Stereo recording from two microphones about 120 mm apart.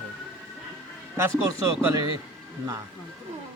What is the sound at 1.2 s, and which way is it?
Speech, 25° right (ahead or behind).